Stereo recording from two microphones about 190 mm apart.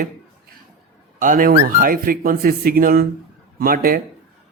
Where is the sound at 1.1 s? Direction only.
45° right (ahead or behind).